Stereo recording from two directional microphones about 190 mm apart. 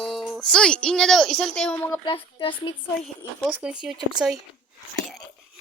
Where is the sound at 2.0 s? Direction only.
30° left (ahead or behind).